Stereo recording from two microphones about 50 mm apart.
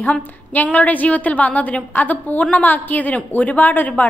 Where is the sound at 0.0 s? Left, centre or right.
Left.